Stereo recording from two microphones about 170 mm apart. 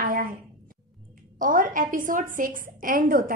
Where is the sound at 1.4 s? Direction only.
50° right (ahead or behind).